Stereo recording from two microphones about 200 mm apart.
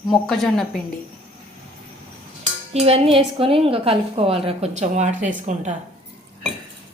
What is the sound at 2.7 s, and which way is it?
A woman's voice, 30° right (ahead or behind).